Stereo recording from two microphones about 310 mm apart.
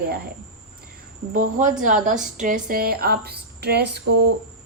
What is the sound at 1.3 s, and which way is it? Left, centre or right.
A woman's voice, right.